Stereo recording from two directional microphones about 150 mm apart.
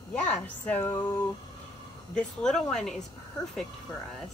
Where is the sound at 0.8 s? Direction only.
25° left (ahead or behind).